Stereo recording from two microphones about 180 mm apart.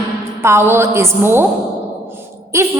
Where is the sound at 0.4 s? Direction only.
15° right (ahead or behind).